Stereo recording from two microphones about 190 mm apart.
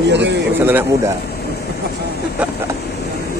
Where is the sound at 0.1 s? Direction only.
65° right (ahead or behind).